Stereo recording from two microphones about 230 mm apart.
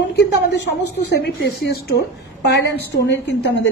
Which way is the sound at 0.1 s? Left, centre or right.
Left.